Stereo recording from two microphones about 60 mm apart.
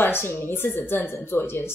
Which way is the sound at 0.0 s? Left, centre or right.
Left.